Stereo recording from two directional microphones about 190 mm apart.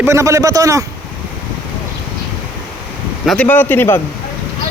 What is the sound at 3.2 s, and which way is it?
Speech, 10° left (ahead or behind).